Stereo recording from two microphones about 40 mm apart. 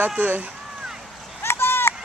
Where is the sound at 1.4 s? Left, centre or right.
Left.